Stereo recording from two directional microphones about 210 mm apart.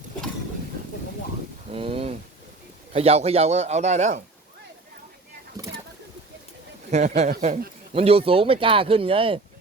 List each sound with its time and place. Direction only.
1.7 s a sound: 25° right (ahead or behind)
2.9 s a man's voice: 30° right (ahead or behind)
6.9 s a man's voice: 35° right (ahead or behind)